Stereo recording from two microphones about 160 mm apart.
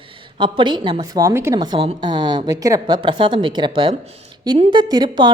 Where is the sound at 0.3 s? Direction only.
30° right (ahead or behind).